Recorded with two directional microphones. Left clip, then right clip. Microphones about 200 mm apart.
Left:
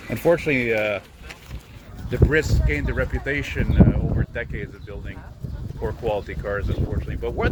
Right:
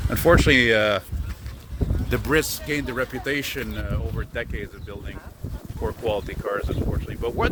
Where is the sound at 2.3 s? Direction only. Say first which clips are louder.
Right 1 dB; 30° right (ahead or behind).